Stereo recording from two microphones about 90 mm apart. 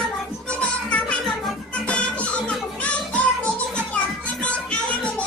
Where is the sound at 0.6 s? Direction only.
15° left (ahead or behind).